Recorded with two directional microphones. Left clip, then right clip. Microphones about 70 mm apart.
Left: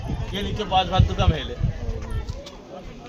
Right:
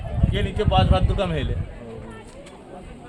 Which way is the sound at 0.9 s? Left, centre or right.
Centre.